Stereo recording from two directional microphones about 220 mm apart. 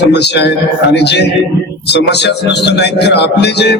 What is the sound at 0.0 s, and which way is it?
Speech, 50° left (ahead or behind).